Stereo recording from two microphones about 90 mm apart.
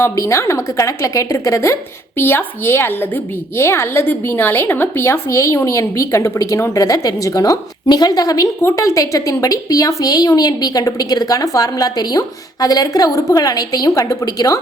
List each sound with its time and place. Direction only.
0.2 s a woman's voice: 35° left (ahead or behind)